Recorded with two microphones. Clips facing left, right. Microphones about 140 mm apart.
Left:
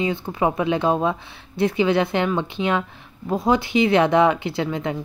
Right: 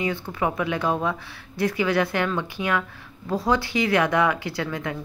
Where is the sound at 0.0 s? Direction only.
25° left (ahead or behind).